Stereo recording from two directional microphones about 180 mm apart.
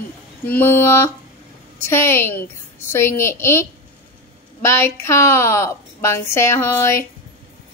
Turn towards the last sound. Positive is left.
turn(degrees=15)  # may be behind; listen again after turning